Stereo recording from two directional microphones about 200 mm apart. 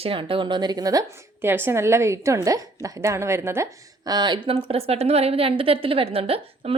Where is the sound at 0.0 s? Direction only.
25° right (ahead or behind).